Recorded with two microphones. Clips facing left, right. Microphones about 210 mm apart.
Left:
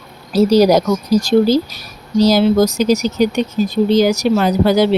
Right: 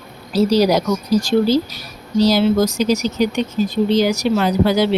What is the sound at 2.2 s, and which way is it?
Speech, 45° left (ahead or behind).